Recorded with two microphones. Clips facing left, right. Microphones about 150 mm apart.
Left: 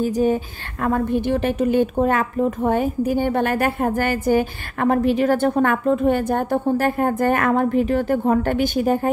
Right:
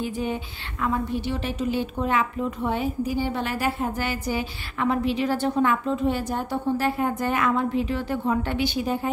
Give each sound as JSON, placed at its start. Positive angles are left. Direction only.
{"t": 0.0, "sound": "a woman's voice", "side_deg": 40}